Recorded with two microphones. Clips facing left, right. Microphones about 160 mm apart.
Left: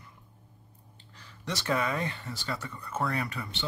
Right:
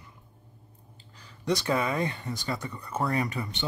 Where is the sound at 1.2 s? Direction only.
15° right (ahead or behind).